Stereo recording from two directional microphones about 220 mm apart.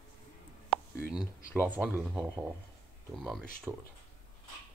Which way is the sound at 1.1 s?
5° right (ahead or behind).